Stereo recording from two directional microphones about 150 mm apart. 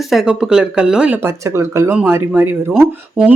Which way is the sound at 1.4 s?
20° right (ahead or behind).